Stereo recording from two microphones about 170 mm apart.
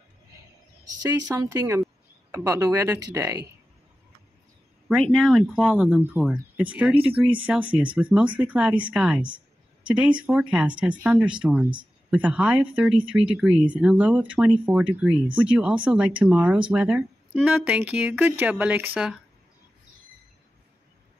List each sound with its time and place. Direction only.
1.3 s speech: 15° right (ahead or behind)
5.0 s speech: centre (ahead or behind)